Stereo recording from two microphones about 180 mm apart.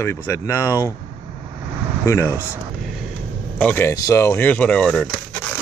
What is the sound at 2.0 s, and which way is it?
Speech, 15° left (ahead or behind).